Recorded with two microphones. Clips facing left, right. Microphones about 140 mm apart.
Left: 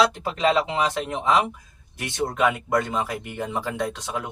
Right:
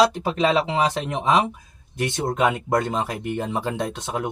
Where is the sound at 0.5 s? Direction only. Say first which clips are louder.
Right 2 dB; 20° right (ahead or behind).